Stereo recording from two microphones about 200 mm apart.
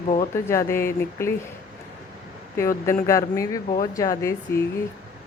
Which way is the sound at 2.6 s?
15° left (ahead or behind).